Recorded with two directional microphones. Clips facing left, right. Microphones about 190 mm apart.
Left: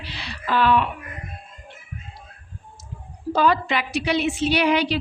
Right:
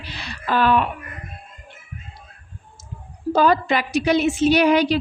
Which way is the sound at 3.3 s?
45° right (ahead or behind).